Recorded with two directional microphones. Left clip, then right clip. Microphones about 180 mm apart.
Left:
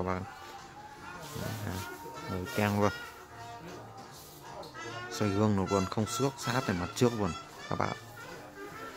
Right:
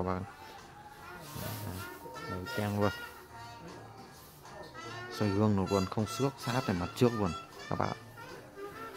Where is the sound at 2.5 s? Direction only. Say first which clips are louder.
Left 5 dB; 15° left (ahead or behind).